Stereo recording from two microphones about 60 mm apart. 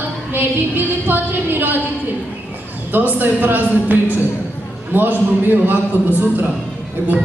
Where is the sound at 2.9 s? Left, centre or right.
Right.